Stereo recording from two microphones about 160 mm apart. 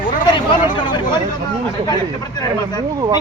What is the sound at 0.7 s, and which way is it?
Speech, 30° left (ahead or behind).